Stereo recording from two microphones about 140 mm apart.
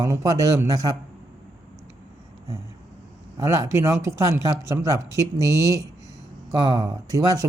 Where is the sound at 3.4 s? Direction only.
20° right (ahead or behind).